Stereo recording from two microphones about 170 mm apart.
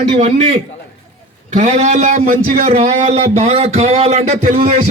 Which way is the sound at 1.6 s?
45° right (ahead or behind).